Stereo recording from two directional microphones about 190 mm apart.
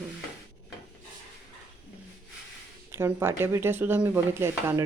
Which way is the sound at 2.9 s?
10° right (ahead or behind).